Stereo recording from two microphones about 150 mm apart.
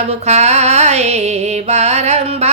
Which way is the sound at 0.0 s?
45° right (ahead or behind).